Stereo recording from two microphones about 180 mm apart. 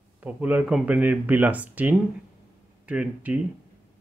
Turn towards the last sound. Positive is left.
turn(degrees=-10)  # may be behind; listen again after turning